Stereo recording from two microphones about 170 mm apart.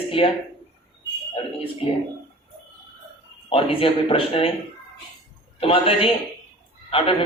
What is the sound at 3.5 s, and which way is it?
A man's voice, 30° left (ahead or behind).